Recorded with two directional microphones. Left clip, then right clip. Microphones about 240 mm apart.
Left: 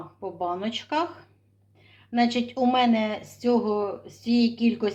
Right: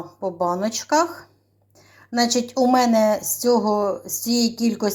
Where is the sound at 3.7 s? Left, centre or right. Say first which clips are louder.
Right 6 dB; centre.